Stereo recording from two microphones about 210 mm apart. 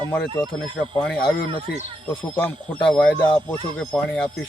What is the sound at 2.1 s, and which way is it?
Speech, 10° left (ahead or behind).